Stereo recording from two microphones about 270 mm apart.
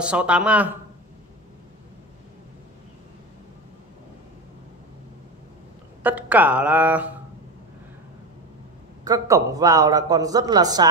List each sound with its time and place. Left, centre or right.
0.0 s speech: centre
6.0 s speech: centre
9.0 s a man's voice: centre